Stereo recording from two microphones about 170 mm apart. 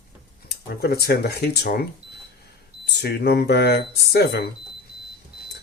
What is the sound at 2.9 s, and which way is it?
Speech, 75° left (ahead or behind).